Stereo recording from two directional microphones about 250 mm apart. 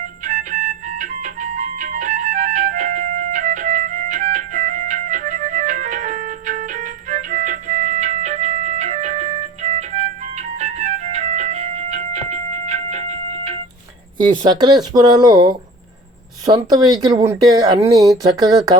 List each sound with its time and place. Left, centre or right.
0.3 s music: right
14.4 s speech: centre